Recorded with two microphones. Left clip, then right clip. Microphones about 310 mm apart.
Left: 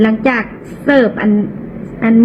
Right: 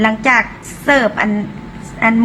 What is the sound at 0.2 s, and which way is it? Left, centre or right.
A woman's voice, right.